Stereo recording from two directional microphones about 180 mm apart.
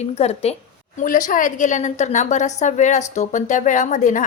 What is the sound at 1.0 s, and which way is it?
A woman's voice, 45° left (ahead or behind).